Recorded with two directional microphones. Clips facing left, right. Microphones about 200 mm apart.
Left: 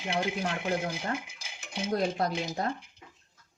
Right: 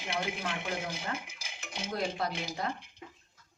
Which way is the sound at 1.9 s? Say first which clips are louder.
Left 5 dB; 40° left (ahead or behind).